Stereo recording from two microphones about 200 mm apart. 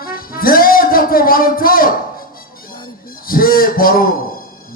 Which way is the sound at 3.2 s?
45° left (ahead or behind).